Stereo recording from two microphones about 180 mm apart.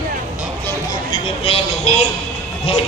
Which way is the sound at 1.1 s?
30° left (ahead or behind).